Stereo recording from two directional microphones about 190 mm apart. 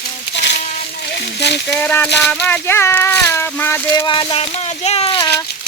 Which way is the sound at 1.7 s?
10° left (ahead or behind).